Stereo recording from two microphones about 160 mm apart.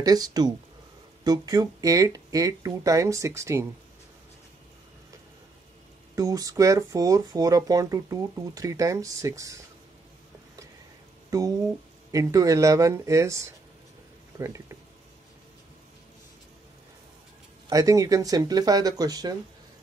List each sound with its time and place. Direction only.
0.0 s speech: 25° right (ahead or behind)
6.1 s speech: 20° right (ahead or behind)
11.2 s speech: 20° right (ahead or behind)
17.6 s speech: 20° right (ahead or behind)